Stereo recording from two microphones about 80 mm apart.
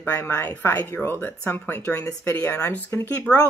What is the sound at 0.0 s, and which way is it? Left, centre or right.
Speech, left.